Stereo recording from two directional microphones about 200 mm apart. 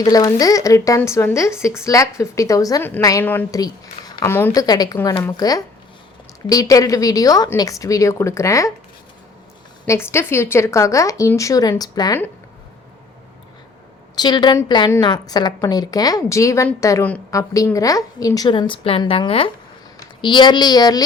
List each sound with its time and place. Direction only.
0.0 s a woman's voice: 20° left (ahead or behind)
9.8 s a woman's voice: 15° left (ahead or behind)
14.2 s a woman's voice: 20° left (ahead or behind)